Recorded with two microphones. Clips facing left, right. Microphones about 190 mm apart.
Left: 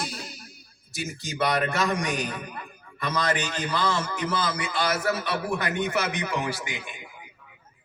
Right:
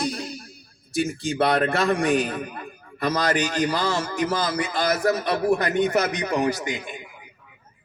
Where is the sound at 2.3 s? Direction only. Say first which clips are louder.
Right 5 dB; 35° right (ahead or behind).